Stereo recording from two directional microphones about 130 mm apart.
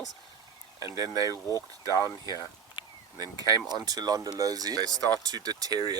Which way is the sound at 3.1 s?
30° right (ahead or behind).